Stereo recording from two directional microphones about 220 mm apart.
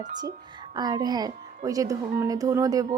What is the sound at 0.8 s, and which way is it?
Speech, 20° right (ahead or behind).